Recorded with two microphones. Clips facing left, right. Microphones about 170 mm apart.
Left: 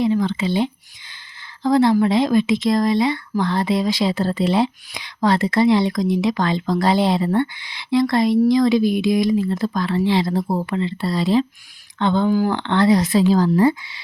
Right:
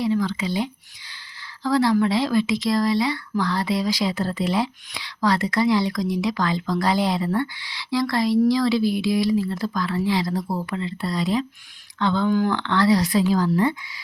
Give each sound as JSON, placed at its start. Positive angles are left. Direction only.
{"t": 0.0, "sound": "speech", "side_deg": 20}